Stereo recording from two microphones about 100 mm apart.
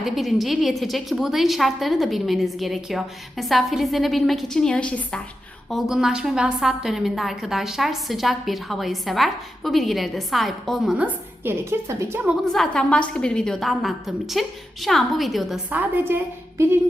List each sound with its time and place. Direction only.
0.0 s a woman's voice: centre (ahead or behind)
5.6 s a woman's voice: centre (ahead or behind)
10.9 s a woman's voice: 15° right (ahead or behind)
11.6 s a woman's voice: 25° right (ahead or behind)
12.5 s a woman's voice: 5° left (ahead or behind)
15.7 s a woman's voice: 20° right (ahead or behind)